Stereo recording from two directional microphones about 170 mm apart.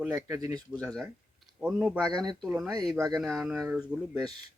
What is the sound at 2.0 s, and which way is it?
Speech, 25° right (ahead or behind).